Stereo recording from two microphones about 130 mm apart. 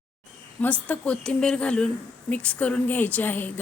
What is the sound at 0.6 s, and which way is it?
A woman's voice, 10° left (ahead or behind).